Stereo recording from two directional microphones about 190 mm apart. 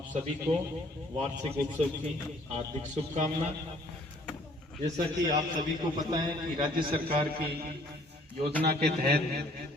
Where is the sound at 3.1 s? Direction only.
35° right (ahead or behind).